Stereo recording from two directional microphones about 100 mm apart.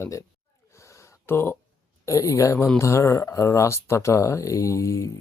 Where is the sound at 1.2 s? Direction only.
25° left (ahead or behind).